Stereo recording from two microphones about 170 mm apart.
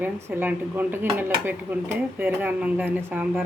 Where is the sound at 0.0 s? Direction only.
10° right (ahead or behind).